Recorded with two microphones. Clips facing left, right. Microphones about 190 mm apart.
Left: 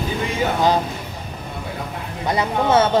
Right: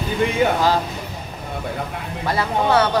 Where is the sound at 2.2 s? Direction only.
20° left (ahead or behind).